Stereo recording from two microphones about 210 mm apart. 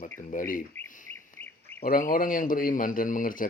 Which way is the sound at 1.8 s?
45° left (ahead or behind).